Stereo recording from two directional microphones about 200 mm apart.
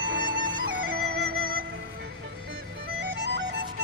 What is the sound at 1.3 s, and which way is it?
Music, 50° right (ahead or behind).